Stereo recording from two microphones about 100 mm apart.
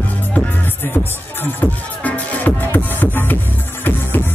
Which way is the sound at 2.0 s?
15° left (ahead or behind).